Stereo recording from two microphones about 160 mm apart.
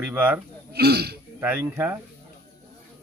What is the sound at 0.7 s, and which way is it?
Speech, 85° right.